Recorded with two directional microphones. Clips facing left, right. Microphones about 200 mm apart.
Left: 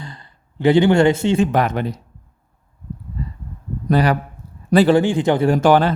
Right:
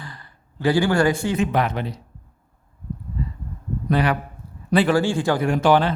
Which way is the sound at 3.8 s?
40° left (ahead or behind).